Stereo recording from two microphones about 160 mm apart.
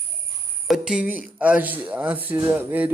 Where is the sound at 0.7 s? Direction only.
5° right (ahead or behind).